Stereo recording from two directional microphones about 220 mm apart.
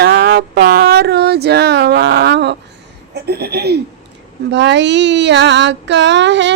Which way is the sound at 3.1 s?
45° right (ahead or behind).